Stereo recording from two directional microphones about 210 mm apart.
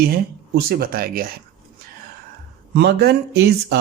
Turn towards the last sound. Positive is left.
turn(degrees=-50)  # may be behind; listen again after turning